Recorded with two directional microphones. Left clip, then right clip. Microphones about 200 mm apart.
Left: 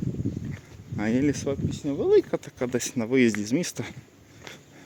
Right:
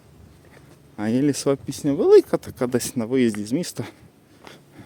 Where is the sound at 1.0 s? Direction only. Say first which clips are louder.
Right 3 dB; 15° right (ahead or behind).